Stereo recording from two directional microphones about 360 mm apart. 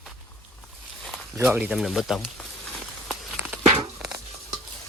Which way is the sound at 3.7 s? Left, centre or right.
Centre.